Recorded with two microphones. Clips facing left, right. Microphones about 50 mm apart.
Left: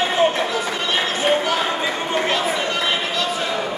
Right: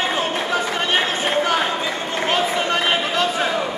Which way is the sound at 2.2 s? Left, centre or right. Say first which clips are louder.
Right 1 dB; right.